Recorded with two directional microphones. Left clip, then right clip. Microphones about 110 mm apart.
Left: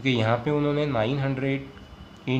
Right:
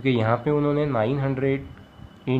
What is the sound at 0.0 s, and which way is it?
Speech, 30° right (ahead or behind).